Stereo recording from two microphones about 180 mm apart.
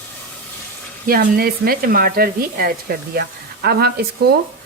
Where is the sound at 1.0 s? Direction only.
55° right (ahead or behind).